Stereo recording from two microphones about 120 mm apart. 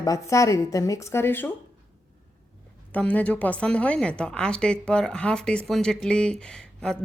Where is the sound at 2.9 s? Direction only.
10° left (ahead or behind).